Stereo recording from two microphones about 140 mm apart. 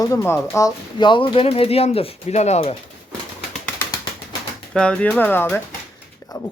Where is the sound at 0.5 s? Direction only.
30° left (ahead or behind); by 2.7 s 50° left (ahead or behind).